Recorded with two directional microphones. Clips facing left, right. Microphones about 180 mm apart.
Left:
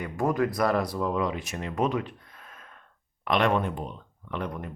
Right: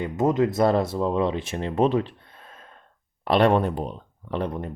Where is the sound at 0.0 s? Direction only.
20° right (ahead or behind).